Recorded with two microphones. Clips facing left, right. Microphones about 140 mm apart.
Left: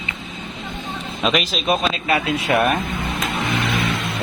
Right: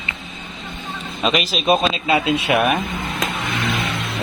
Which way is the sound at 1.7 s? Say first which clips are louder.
Right 4 dB; 20° right (ahead or behind).